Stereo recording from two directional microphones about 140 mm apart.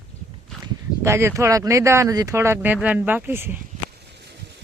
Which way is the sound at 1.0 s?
20° right (ahead or behind).